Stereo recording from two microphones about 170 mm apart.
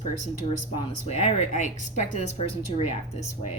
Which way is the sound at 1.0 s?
40° left (ahead or behind).